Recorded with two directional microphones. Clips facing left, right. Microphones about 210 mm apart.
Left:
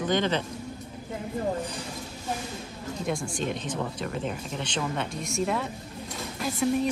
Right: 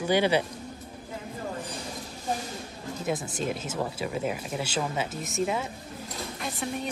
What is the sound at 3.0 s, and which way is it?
Speech, 5° right (ahead or behind).